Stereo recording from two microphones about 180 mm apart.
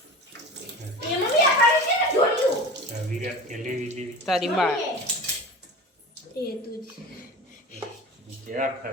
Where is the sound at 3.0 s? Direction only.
45° right (ahead or behind).